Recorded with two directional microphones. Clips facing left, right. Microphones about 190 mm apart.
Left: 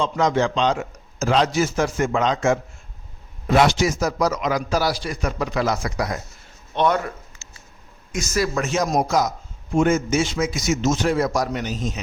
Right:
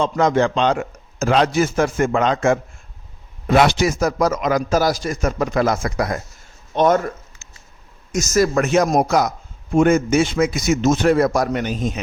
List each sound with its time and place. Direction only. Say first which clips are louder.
0.0 s a man's voice: right 3 dB; 55° right (ahead or behind)
8.1 s a man's voice: right 6 dB; 45° right (ahead or behind)
8.5 s a man's voice: right 5 dB; 60° right (ahead or behind)